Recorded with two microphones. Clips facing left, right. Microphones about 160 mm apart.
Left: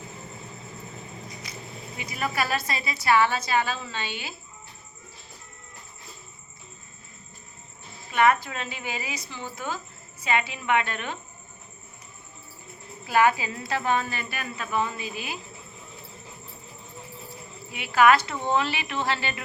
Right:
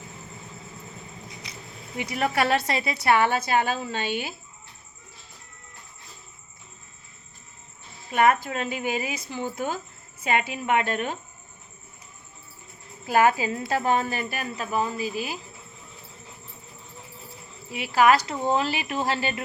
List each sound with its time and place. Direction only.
2.0 s a woman's voice: 70° right (ahead or behind); by 4.4 s 50° right (ahead or behind)
8.1 s a woman's voice: 45° right (ahead or behind)
13.1 s a woman's voice: 45° right (ahead or behind)
17.7 s speech: 35° right (ahead or behind)